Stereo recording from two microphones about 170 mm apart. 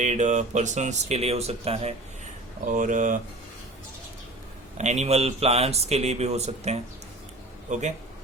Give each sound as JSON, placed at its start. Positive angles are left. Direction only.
{"t": 0.0, "sound": "speech", "side_deg": -45}
{"t": 2.6, "sound": "speech", "side_deg": -50}
{"t": 4.8, "sound": "speech", "side_deg": -40}